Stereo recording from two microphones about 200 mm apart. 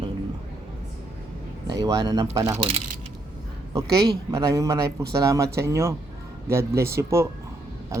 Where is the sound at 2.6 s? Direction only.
30° right (ahead or behind).